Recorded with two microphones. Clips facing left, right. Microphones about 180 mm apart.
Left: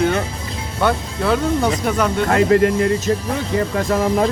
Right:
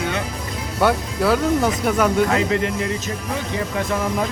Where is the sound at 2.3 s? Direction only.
50° left (ahead or behind).